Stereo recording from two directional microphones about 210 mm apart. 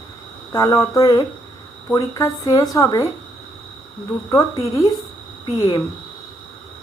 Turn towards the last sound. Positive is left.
turn(degrees=20)  # may be behind; listen again after turning